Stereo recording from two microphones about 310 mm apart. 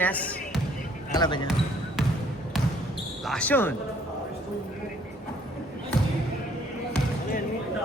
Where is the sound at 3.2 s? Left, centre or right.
Centre.